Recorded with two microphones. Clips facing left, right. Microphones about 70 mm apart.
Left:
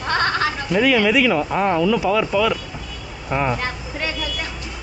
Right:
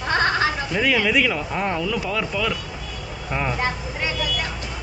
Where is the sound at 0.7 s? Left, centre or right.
Centre.